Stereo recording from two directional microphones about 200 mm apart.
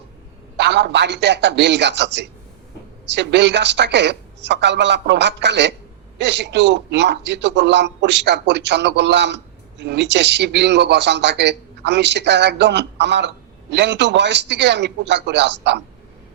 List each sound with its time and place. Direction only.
0.5 s a man's voice: 60° right (ahead or behind)